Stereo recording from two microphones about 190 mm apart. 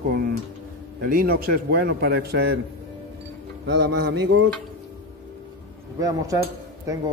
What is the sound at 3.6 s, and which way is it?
Mantra, 65° right (ahead or behind).